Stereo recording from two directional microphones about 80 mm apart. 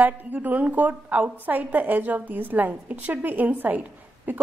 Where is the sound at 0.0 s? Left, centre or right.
Right.